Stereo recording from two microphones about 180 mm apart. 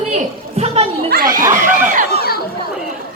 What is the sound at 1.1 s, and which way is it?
Snicker, 50° right (ahead or behind).